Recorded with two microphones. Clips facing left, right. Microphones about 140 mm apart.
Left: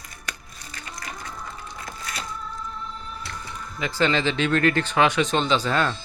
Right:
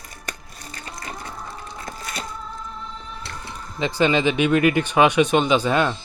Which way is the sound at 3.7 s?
20° right (ahead or behind).